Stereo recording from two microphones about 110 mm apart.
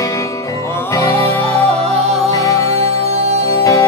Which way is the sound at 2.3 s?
30° left (ahead or behind).